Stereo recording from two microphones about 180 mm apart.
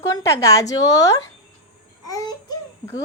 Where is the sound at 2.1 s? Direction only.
20° left (ahead or behind).